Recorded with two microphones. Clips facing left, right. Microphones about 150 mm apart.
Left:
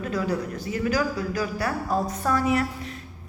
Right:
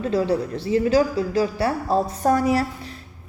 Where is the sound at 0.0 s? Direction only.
30° right (ahead or behind).